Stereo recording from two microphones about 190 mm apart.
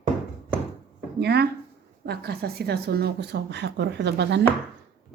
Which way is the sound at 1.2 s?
60° right (ahead or behind).